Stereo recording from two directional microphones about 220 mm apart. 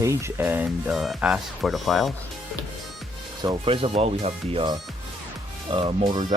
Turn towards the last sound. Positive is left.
turn(degrees=-20)  # may be behind; listen again after turning